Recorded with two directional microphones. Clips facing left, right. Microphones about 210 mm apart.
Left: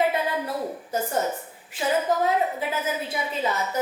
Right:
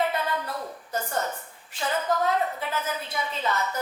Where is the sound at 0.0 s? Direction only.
10° left (ahead or behind).